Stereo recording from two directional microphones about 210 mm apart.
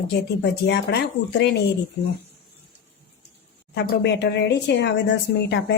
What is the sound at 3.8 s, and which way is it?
Speech, 55° left (ahead or behind).